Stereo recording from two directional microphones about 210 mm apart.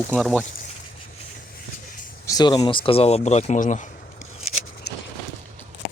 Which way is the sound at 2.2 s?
20° left (ahead or behind).